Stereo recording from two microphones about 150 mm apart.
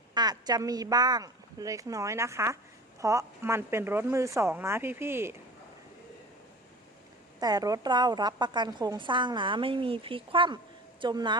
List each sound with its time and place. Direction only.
0.1 s a woman's voice: 25° right (ahead or behind)
7.3 s a woman's voice: 25° right (ahead or behind)